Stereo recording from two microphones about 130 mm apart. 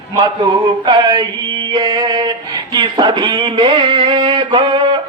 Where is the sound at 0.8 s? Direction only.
35° right (ahead or behind).